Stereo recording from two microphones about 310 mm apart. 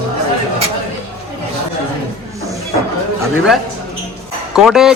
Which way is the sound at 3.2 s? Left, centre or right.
Centre.